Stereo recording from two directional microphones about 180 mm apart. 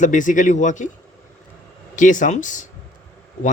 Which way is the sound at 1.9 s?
45° left (ahead or behind).